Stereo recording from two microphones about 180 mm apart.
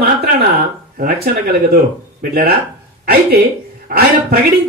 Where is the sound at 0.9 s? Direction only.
55° right (ahead or behind).